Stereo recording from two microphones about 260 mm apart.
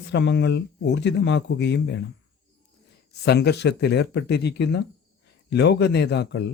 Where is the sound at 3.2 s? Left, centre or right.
Left.